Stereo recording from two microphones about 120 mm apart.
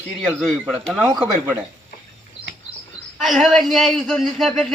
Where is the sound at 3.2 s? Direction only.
Centre (ahead or behind).